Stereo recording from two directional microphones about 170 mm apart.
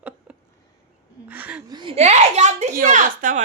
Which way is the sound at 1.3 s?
10° right (ahead or behind).